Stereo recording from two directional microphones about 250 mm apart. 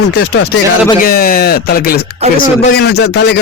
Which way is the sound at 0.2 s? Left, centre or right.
Left.